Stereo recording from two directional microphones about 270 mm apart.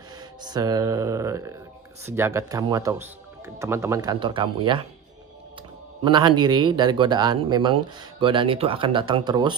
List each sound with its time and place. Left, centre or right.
0.4 s speech: centre
6.0 s speech: centre